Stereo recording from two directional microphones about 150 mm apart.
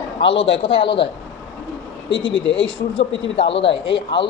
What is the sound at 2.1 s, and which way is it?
Speech, 35° left (ahead or behind).